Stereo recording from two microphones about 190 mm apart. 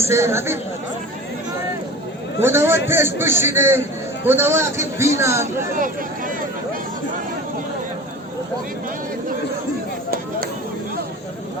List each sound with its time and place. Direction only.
0.0 s a man's voice: 15° right (ahead or behind)
2.4 s a man's voice: 10° right (ahead or behind)
5.7 s speech: 45° right (ahead or behind)